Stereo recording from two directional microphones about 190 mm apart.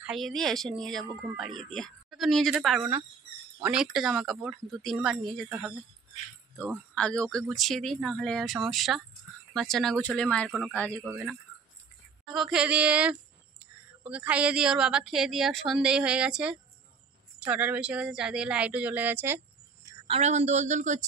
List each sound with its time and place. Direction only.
0.0 s a woman's voice: centre (ahead or behind)
2.8 s speech: 20° right (ahead or behind)
3.6 s a woman's voice: 5° right (ahead or behind)
11.0 s a woman's voice: 5° right (ahead or behind)
20.1 s a woman's voice: 35° right (ahead or behind)